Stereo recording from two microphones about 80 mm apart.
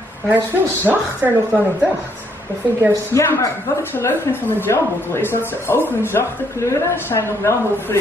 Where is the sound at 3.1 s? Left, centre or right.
Left.